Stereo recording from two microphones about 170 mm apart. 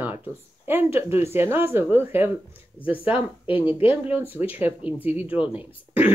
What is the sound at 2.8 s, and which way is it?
Speech, 30° left (ahead or behind).